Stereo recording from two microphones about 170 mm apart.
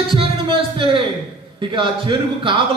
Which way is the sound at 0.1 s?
30° right (ahead or behind).